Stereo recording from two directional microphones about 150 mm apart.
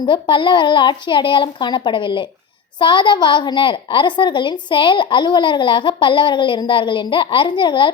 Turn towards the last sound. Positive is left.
turn(degrees=35)  # may be behind; listen again after turning